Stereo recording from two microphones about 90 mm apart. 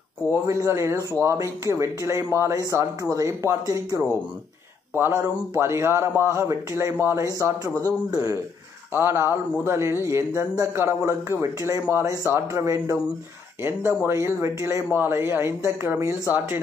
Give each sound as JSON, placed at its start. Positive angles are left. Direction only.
{"t": 0.3, "sound": "a man's voice", "side_deg": -35}
{"t": 4.9, "sound": "a man's voice", "side_deg": -25}
{"t": 8.9, "sound": "a man's voice", "side_deg": -25}